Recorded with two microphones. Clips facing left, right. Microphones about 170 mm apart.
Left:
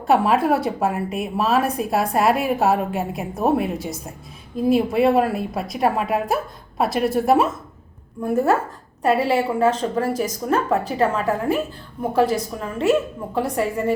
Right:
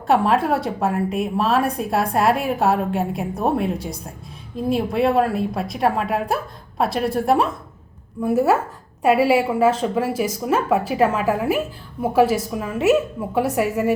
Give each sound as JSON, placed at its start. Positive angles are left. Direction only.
{"t": 0.1, "sound": "a woman's voice", "side_deg": 0}